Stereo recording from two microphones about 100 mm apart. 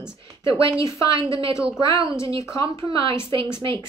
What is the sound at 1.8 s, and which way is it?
Speech, 55° right (ahead or behind).